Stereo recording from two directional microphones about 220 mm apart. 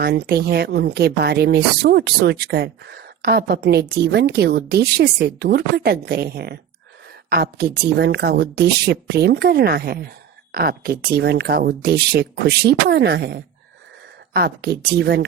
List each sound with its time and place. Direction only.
0.0 s a woman's voice: 45° right (ahead or behind)